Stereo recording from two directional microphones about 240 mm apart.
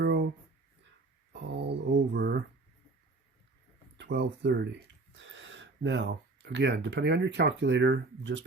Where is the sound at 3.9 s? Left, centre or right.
Right.